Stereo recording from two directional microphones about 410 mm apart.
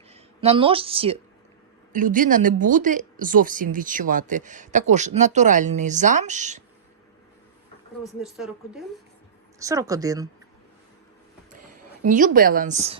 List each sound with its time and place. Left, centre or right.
0.1 s a woman's voice: centre
8.0 s a woman's voice: centre
12.0 s speech: centre